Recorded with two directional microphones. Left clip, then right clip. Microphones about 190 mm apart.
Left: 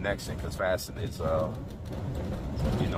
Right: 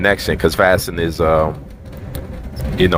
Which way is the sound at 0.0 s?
40° right (ahead or behind).